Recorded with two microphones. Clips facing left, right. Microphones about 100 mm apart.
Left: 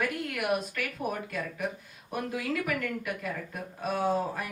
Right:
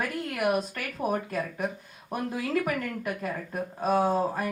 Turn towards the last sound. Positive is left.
turn(degrees=-35)  # may be behind; listen again after turning